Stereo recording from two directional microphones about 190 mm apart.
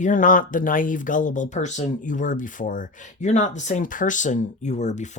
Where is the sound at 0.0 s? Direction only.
45° left (ahead or behind).